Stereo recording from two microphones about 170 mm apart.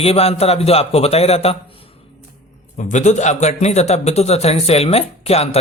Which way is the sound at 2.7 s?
45° left (ahead or behind).